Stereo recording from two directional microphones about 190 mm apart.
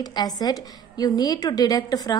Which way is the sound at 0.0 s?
20° left (ahead or behind).